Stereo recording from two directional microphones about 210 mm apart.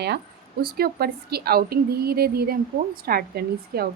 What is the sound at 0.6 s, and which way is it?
Speech, 45° right (ahead or behind).